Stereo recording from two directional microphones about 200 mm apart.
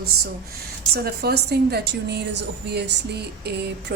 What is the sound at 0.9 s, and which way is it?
A woman's voice, 50° right (ahead or behind).